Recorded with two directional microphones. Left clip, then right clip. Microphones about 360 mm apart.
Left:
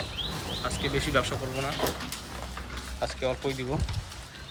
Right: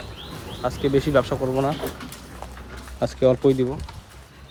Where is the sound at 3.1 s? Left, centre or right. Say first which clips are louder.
Right 14 dB; right.